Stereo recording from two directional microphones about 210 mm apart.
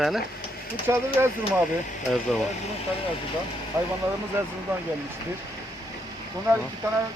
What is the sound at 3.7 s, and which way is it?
Speech, 10° right (ahead or behind).